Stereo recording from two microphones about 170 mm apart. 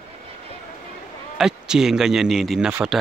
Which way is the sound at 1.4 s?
5° right (ahead or behind).